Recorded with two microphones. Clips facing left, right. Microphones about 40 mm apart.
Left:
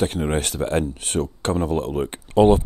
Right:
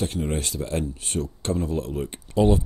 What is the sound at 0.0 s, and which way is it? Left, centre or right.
Speech, left.